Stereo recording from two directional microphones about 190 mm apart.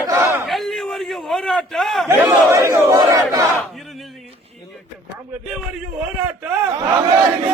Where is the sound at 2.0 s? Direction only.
15° right (ahead or behind).